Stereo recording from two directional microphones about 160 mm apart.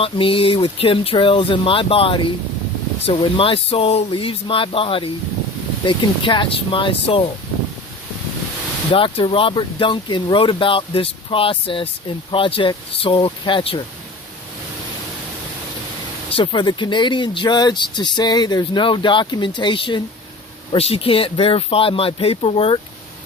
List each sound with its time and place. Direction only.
0.0 s speech: 35° left (ahead or behind)
8.9 s speech: 35° left (ahead or behind)
16.3 s speech: 30° left (ahead or behind)